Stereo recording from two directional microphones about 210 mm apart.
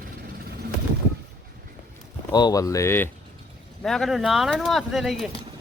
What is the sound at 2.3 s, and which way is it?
Speech, 20° left (ahead or behind).